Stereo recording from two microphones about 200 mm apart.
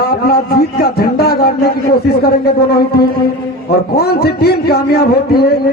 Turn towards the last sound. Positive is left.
turn(degrees=50)  # may be behind; listen again after turning